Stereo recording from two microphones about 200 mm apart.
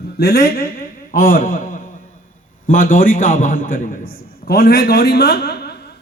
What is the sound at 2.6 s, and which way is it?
A man's voice, 40° left (ahead or behind).